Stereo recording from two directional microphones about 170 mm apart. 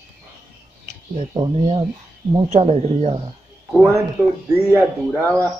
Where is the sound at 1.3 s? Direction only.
30° right (ahead or behind).